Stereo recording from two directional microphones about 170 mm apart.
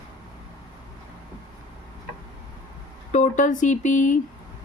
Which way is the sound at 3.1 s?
45° left (ahead or behind).